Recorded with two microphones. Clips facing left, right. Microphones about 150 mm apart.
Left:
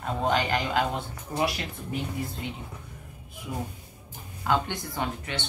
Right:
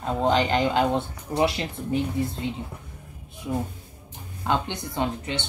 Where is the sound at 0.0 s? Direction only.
25° right (ahead or behind).